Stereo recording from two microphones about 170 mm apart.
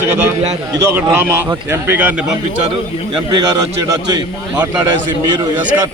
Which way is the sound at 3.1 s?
25° right (ahead or behind).